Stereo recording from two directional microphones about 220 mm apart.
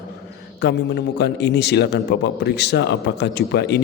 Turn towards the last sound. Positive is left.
turn(degrees=50)  # may be behind; listen again after turning